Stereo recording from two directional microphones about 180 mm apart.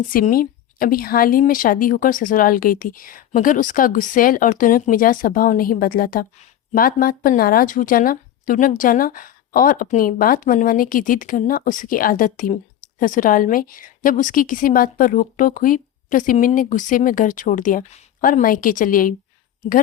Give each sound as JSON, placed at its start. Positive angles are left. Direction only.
{"t": 0.1, "sound": "speech", "side_deg": 50}